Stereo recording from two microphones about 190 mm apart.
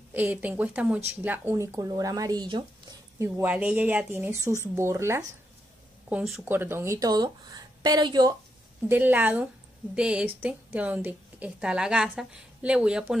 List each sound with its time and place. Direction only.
0.1 s speech: 10° right (ahead or behind)
3.2 s speech: 10° right (ahead or behind)
8.8 s a woman's voice: 10° right (ahead or behind)